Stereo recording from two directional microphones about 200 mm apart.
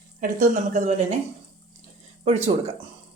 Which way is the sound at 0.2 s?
40° right (ahead or behind).